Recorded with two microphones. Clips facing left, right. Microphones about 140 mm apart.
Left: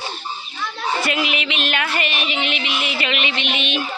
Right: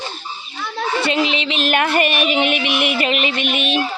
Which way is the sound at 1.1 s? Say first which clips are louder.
Right 4 dB; 30° right (ahead or behind).